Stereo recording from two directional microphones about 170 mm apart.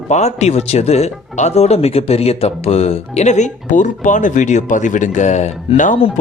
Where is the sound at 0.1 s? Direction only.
40° left (ahead or behind).